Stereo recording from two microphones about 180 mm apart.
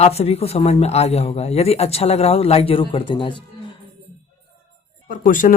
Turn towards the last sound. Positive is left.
turn(degrees=45)  # may be behind; listen again after turning